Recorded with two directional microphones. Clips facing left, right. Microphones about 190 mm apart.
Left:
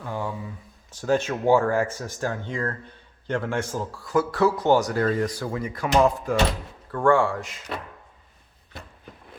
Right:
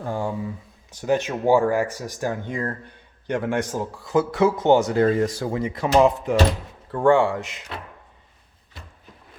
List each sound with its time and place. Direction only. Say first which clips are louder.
0.0 s speech: right 4 dB; 30° right (ahead or behind)
0.9 s speech: right 1 dB; 15° right (ahead or behind)